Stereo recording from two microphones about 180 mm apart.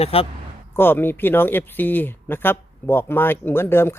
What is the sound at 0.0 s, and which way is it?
Speech, 30° left (ahead or behind).